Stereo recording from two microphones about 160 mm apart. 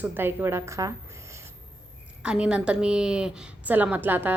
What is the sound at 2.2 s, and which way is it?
A woman's voice, 5° right (ahead or behind).